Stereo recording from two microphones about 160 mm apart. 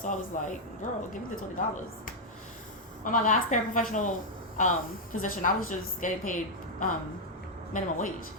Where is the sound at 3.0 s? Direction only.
55° left (ahead or behind).